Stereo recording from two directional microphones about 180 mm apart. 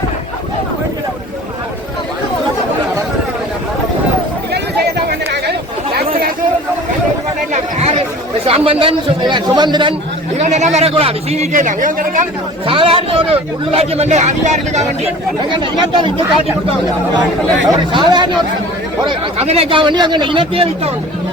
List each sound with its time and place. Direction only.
5.0 s a sound: 65° right (ahead or behind)
7.5 s chatter: 35° right (ahead or behind)
8.4 s a man's voice: 35° right (ahead or behind)
10.3 s a man's voice: 40° right (ahead or behind)
12.6 s a man's voice: 30° right (ahead or behind)
15.4 s speech: 25° right (ahead or behind)
17.7 s speech: 25° right (ahead or behind)